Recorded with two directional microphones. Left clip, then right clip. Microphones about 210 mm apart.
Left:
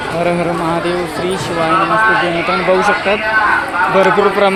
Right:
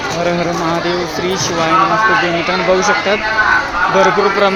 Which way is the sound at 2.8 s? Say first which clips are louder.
Even; 5° left (ahead or behind).